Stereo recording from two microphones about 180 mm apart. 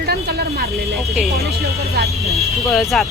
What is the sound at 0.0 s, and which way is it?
Speech, 60° right (ahead or behind).